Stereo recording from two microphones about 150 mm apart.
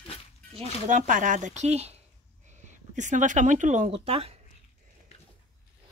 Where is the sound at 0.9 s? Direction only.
60° right (ahead or behind).